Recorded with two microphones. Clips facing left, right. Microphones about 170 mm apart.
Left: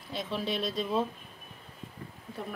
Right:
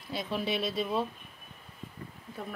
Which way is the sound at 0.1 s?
5° right (ahead or behind).